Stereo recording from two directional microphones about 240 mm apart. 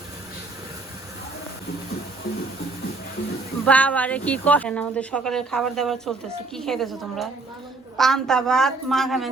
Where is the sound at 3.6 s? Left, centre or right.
Centre.